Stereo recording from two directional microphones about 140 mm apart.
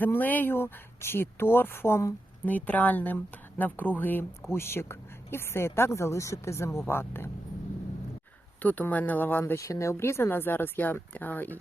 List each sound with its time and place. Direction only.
0.0 s speech: 15° left (ahead or behind)
8.6 s speech: 10° left (ahead or behind)